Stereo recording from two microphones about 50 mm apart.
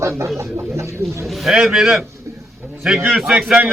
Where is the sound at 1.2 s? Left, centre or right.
Centre.